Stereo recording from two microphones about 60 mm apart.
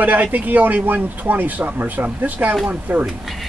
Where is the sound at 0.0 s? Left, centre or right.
Right.